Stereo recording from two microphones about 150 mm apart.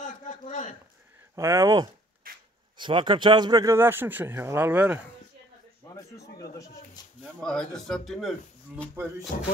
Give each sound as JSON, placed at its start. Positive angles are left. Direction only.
{"t": 0.0, "sound": "a sound", "side_deg": 55}
{"t": 1.3, "sound": "speech", "side_deg": -20}
{"t": 2.3, "sound": "a sound", "side_deg": -75}
{"t": 2.8, "sound": "speech", "side_deg": -30}
{"t": 3.7, "sound": "speech", "side_deg": -15}
{"t": 5.9, "sound": "speech", "side_deg": 25}
{"t": 7.3, "sound": "speech", "side_deg": 5}
{"t": 9.3, "sound": "music", "side_deg": 65}